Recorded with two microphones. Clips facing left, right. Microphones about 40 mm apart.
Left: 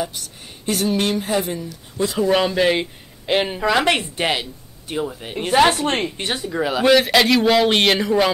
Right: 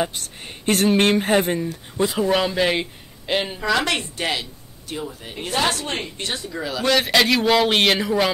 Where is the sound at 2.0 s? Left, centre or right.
Centre.